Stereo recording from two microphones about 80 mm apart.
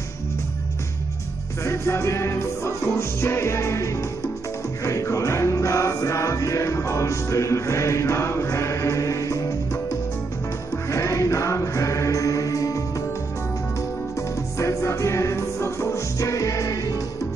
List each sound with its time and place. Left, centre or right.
1.6 s music: left
10.9 s choir: left
14.6 s music: left